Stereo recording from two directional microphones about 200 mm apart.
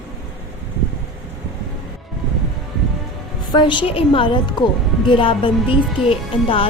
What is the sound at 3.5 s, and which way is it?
Speech, 25° left (ahead or behind).